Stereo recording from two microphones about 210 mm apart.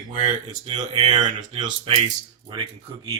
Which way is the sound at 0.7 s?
25° right (ahead or behind).